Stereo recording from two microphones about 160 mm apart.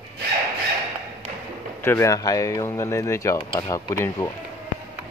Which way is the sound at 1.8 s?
15° left (ahead or behind).